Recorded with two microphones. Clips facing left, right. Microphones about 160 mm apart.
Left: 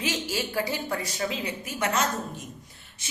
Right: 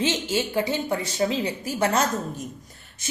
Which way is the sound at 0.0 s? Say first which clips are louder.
Right 5 dB; 25° right (ahead or behind).